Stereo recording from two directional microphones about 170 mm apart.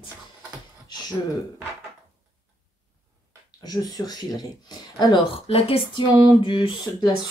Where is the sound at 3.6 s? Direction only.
20° left (ahead or behind).